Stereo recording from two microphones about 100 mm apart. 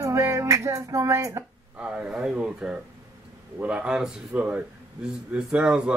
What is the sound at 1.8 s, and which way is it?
Speech, 10° right (ahead or behind).